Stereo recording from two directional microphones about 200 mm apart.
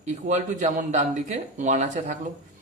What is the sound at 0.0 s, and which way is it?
Speech, 35° right (ahead or behind).